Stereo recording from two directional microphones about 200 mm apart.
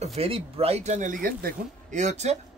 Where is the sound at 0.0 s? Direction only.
30° right (ahead or behind).